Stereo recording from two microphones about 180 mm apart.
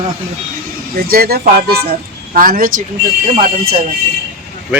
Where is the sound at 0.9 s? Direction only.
55° right (ahead or behind).